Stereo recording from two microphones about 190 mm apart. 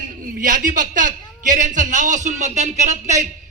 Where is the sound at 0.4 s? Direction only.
45° right (ahead or behind).